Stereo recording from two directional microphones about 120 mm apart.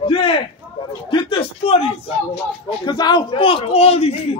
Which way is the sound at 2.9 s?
40° left (ahead or behind).